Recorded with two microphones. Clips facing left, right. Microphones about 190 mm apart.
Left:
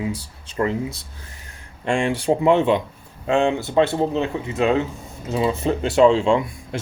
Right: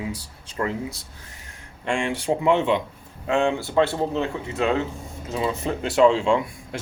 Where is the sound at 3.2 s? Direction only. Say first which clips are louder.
Left 3 dB; 25° left (ahead or behind).